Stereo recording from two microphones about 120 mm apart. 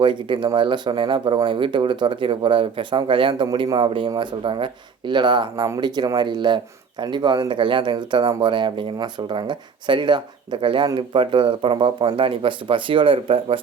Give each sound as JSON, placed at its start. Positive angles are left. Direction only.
{"t": 0.0, "sound": "speech", "side_deg": -40}